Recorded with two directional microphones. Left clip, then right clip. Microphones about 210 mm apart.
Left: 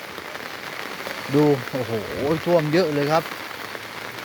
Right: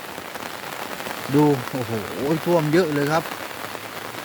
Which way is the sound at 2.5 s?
10° right (ahead or behind).